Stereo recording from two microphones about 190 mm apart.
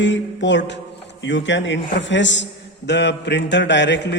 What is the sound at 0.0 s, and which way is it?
A man's voice, 70° left (ahead or behind).